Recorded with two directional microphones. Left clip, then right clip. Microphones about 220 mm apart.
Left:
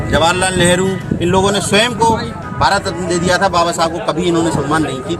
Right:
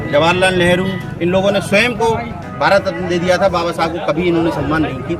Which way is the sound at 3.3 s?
5° right (ahead or behind).